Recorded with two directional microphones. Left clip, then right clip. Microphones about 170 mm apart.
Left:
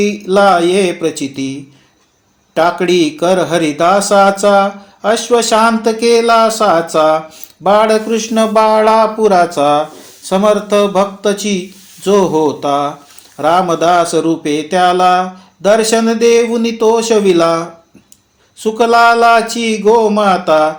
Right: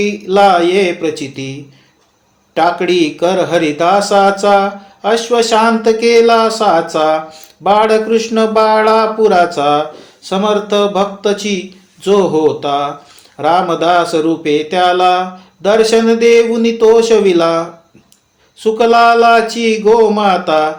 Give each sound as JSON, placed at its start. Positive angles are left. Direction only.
{"t": 0.0, "sound": "speech", "side_deg": 45}
{"t": 2.6, "sound": "speech", "side_deg": 45}